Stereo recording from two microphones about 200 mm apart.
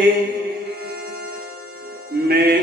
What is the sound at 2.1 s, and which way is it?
Music, 50° right (ahead or behind).